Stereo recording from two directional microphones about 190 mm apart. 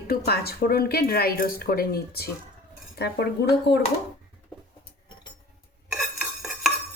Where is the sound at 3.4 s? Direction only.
65° left (ahead or behind).